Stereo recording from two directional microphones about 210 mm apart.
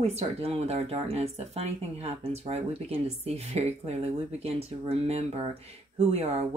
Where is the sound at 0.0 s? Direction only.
30° right (ahead or behind).